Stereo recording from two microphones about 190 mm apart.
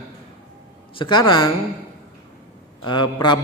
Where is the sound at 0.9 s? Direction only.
25° left (ahead or behind).